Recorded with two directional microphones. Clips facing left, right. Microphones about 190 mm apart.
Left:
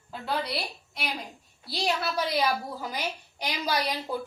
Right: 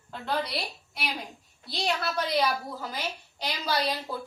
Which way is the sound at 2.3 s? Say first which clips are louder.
Even; 10° left (ahead or behind).